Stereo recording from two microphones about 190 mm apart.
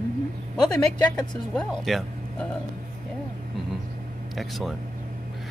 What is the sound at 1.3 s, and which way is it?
Speech, 5° left (ahead or behind).